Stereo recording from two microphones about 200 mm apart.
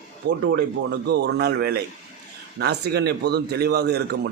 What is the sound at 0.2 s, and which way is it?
A man's voice, 55° right (ahead or behind).